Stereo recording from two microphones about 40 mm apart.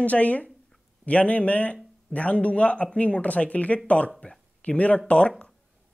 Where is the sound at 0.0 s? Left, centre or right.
Left.